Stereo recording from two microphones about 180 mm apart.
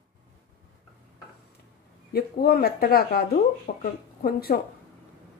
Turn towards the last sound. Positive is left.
turn(degrees=55)  # may be behind; listen again after turning